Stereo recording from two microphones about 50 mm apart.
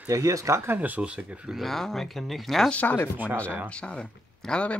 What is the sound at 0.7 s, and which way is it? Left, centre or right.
Speech, right.